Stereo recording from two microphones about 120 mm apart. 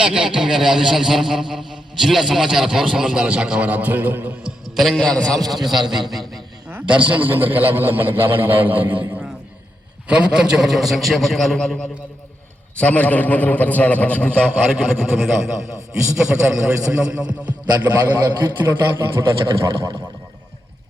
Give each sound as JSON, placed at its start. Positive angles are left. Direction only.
{"t": 0.0, "sound": "a man's voice", "side_deg": -5}
{"t": 4.4, "sound": "a man's voice", "side_deg": 0}
{"t": 6.7, "sound": "a sound", "side_deg": -15}
{"t": 7.1, "sound": "a man's voice", "side_deg": -15}
{"t": 10.1, "sound": "a man's voice", "side_deg": -10}